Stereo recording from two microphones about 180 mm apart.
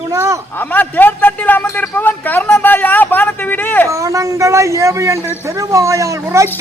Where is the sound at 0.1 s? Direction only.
15° right (ahead or behind).